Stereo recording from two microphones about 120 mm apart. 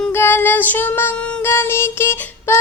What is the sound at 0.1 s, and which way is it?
Music, 20° left (ahead or behind).